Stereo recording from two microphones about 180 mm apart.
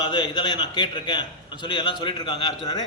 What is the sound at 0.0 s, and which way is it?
A man's voice, 25° left (ahead or behind).